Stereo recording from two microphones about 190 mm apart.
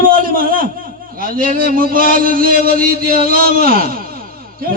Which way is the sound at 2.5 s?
40° left (ahead or behind).